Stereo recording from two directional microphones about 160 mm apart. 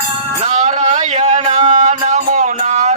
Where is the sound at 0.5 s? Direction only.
50° right (ahead or behind).